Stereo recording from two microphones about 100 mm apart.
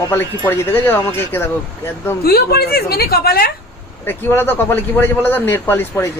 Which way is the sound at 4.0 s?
20° left (ahead or behind).